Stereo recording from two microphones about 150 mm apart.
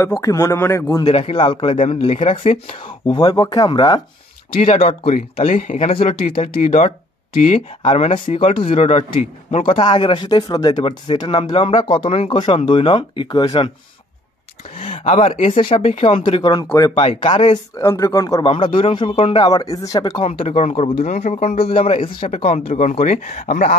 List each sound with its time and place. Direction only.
0.0 s speech: 20° left (ahead or behind)
1.0 s speech: 40° left (ahead or behind)
3.1 s speech: 30° left (ahead or behind)
4.5 s speech: 40° left (ahead or behind)
14.8 s speech: 45° left (ahead or behind); by 17.0 s 25° left (ahead or behind)
17.0 s speech: 35° left (ahead or behind)
17.7 s speech: 20° left (ahead or behind)
18.4 s speech: 35° left (ahead or behind)
20.2 s speech: 40° left (ahead or behind); by 23.8 s 60° left (ahead or behind)